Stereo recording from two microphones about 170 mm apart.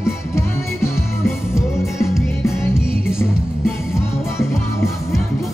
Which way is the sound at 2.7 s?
5° right (ahead or behind).